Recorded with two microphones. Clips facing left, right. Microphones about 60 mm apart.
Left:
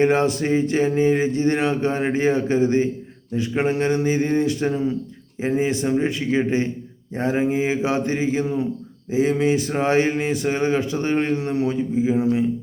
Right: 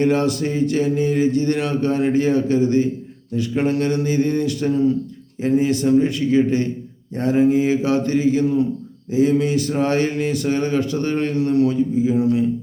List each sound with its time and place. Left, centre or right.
0.0 s speech: left